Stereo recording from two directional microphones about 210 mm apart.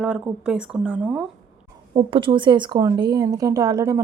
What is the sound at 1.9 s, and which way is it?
Speech, 25° right (ahead or behind).